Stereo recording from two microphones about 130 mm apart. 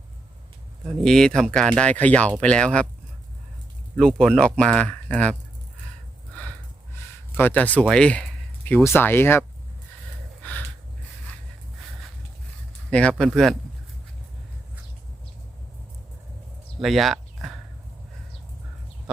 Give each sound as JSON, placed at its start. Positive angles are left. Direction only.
{"t": 1.0, "sound": "speech", "side_deg": 5}
{"t": 3.9, "sound": "speech", "side_deg": 5}
{"t": 6.9, "sound": "speech", "side_deg": 15}
{"t": 10.4, "sound": "a sound", "side_deg": 15}
{"t": 12.9, "sound": "speech", "side_deg": 10}
{"t": 16.8, "sound": "a sound", "side_deg": 0}